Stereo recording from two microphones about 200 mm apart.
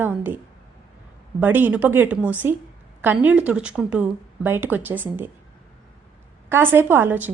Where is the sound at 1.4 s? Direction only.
10° right (ahead or behind).